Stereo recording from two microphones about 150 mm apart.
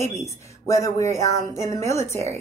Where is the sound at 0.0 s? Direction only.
20° left (ahead or behind).